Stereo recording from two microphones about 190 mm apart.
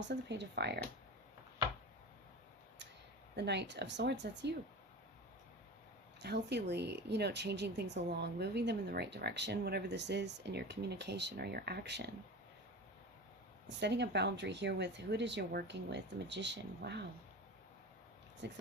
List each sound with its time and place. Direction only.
0.1 s speech: 65° right (ahead or behind)
3.3 s speech: 65° right (ahead or behind)
6.2 s speech: 60° right (ahead or behind)
13.7 s speech: 65° right (ahead or behind)
18.4 s speech: 65° right (ahead or behind)